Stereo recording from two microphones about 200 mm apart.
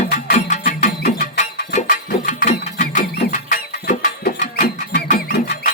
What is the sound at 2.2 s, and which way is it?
Music, 40° left (ahead or behind).